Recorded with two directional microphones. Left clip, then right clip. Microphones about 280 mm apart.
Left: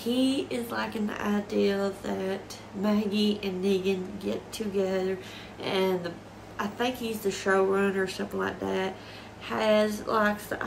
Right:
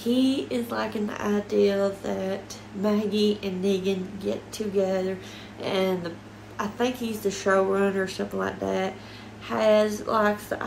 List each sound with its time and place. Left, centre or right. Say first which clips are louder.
0.0 s a woman's voice: right 3 dB; centre